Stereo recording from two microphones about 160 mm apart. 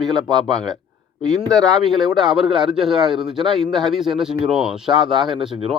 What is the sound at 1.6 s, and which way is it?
A man's voice, centre (ahead or behind).